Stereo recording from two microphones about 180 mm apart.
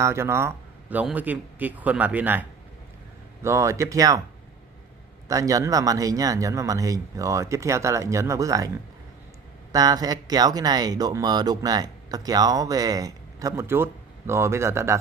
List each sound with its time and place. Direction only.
0.0 s speech: 15° right (ahead or behind)
3.4 s speech: 15° right (ahead or behind)
5.3 s speech: 20° right (ahead or behind)